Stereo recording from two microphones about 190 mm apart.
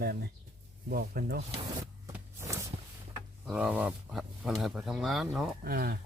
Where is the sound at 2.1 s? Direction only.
15° right (ahead or behind).